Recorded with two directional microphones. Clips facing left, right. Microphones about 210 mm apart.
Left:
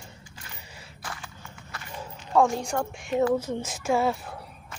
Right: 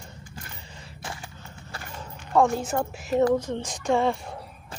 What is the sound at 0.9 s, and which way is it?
Horse, 25° right (ahead or behind).